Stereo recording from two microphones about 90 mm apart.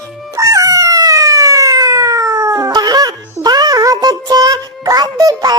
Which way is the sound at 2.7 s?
45° right (ahead or behind).